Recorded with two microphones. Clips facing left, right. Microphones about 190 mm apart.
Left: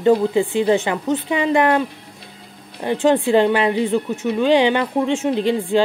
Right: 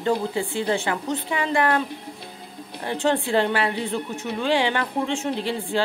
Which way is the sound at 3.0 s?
15° left (ahead or behind).